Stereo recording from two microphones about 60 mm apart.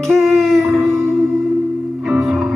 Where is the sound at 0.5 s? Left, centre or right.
Right.